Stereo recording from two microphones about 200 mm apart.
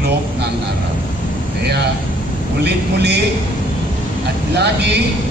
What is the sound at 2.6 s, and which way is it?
Speech, 55° right (ahead or behind).